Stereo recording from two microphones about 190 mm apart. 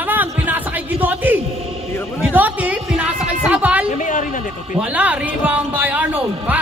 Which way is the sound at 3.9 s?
40° left (ahead or behind).